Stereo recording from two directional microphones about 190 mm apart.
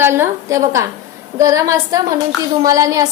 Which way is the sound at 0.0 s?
10° right (ahead or behind).